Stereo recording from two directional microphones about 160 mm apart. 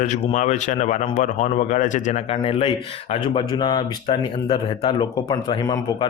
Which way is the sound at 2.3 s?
35° left (ahead or behind).